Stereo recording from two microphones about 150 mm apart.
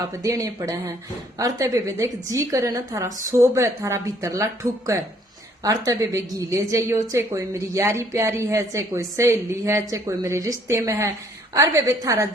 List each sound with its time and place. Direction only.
0.1 s a woman's voice: 20° right (ahead or behind)